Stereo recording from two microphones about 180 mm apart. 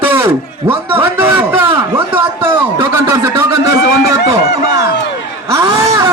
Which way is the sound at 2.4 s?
20° right (ahead or behind).